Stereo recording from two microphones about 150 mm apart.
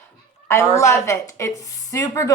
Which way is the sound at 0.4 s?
20° left (ahead or behind).